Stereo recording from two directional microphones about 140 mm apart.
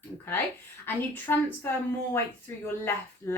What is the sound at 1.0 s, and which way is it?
Speech, 15° left (ahead or behind).